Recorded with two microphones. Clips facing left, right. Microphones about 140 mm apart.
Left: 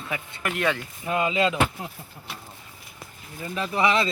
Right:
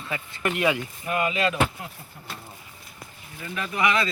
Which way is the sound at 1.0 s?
20° left (ahead or behind).